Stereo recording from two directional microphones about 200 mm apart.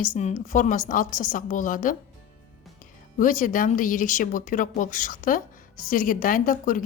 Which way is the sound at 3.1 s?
40° left (ahead or behind).